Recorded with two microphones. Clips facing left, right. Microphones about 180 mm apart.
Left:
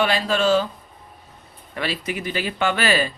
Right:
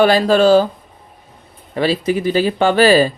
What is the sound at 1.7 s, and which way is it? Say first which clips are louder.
Speech: right 10 dB; 30° right (ahead or behind).